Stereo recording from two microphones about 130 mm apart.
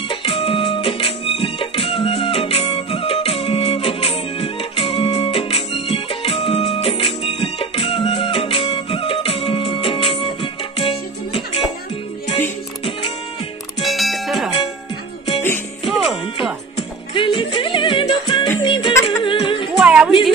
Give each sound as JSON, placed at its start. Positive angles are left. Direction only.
{"t": 0.1, "sound": "music", "side_deg": 45}
{"t": 13.8, "sound": "music", "side_deg": 0}
{"t": 15.9, "sound": "music", "side_deg": 0}
{"t": 16.7, "sound": "music", "side_deg": 40}
{"t": 19.8, "sound": "music", "side_deg": -5}